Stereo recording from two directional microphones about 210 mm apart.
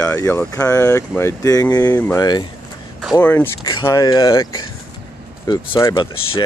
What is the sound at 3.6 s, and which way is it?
Speech, 20° left (ahead or behind).